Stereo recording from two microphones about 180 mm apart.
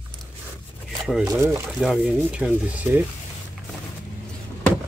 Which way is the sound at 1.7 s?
5° right (ahead or behind).